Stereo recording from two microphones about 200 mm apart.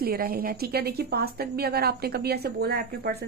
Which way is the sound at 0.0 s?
50° right (ahead or behind).